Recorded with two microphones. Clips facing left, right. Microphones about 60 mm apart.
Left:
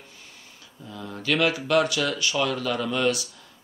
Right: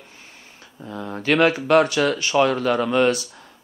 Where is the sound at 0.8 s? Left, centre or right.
Right.